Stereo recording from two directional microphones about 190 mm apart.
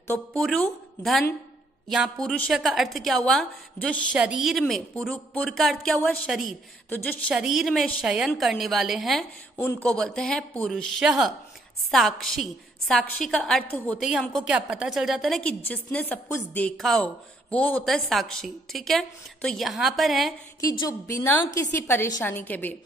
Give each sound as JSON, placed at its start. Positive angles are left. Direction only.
{"t": 0.1, "sound": "a woman's voice", "side_deg": 5}
{"t": 20.8, "sound": "a woman's voice", "side_deg": 15}